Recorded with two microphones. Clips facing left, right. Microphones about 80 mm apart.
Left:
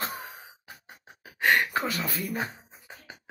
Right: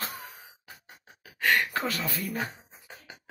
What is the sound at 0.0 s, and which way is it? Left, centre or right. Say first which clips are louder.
Sigh: left 3 dB; left.